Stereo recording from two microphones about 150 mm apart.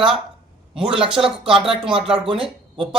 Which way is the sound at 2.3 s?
40° right (ahead or behind).